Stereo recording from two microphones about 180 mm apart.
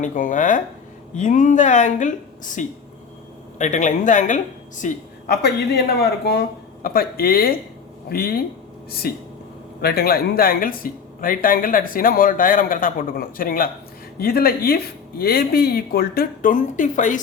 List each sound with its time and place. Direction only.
0.0 s a woman's voice: 45° left (ahead or behind)